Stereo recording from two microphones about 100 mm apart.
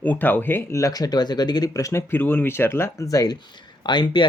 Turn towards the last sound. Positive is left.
turn(degrees=50)  # may be behind; listen again after turning